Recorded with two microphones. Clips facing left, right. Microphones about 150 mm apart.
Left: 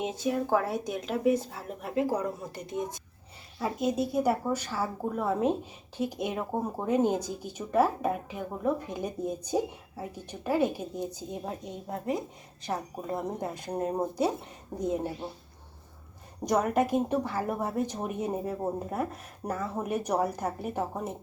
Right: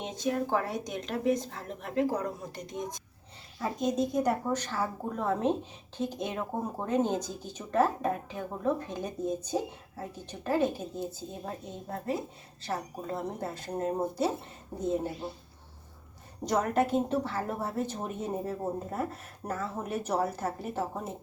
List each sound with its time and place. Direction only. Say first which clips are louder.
0.0 s a woman's voice: left 2 dB; 5° left (ahead or behind)
16.4 s speech: left 1 dB; 10° left (ahead or behind)